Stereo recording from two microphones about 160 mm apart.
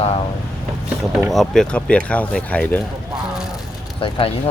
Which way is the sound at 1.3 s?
Centre (ahead or behind).